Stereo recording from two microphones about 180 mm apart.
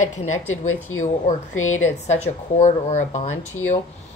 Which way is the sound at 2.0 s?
40° left (ahead or behind).